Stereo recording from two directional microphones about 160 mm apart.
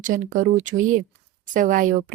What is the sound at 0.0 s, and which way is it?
A woman's voice, 55° right (ahead or behind).